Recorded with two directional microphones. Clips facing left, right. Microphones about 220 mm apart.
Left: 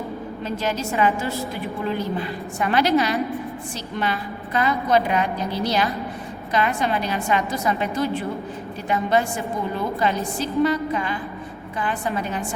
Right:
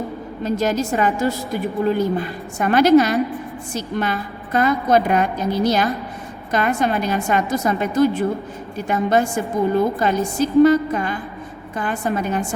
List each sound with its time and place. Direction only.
0.4 s a woman's voice: 45° right (ahead or behind)